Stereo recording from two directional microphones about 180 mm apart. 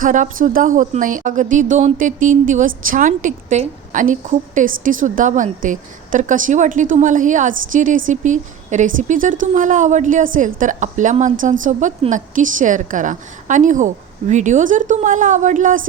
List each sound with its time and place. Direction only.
0.0 s a woman's voice: 45° right (ahead or behind)